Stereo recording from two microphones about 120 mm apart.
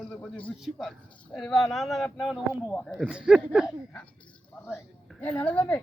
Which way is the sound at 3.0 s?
10° right (ahead or behind).